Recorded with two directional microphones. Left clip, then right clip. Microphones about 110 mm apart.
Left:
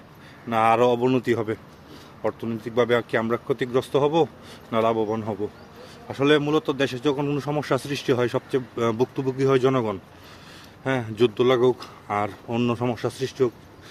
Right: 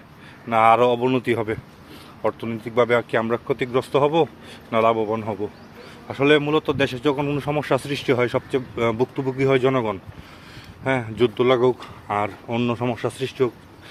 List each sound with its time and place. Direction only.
0.5 s speech: 25° left (ahead or behind)
1.3 s speech: 20° left (ahead or behind)
4.7 s a man's voice: 15° left (ahead or behind)
4.9 s speech: 30° left (ahead or behind)
6.7 s speech: 20° left (ahead or behind)